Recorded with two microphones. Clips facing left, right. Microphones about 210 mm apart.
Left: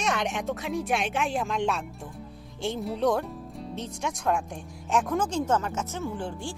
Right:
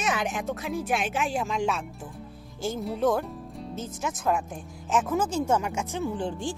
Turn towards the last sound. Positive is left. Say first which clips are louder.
# right 3 dB
turn(degrees=-20)  # may be behind; listen again after turning